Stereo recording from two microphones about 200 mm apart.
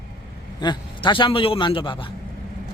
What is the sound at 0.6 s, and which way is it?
A man's voice, 25° left (ahead or behind).